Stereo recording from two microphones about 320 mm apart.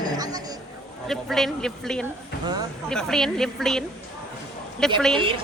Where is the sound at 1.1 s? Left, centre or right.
Centre.